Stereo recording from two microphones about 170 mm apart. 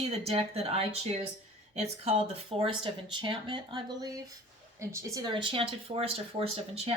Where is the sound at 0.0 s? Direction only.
35° right (ahead or behind).